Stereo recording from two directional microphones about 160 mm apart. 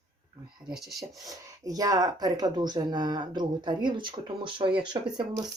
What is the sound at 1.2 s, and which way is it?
Speech, 25° right (ahead or behind).